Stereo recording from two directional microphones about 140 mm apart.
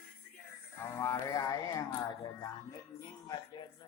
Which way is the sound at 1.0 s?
20° left (ahead or behind).